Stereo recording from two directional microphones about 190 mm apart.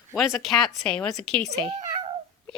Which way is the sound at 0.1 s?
Centre (ahead or behind).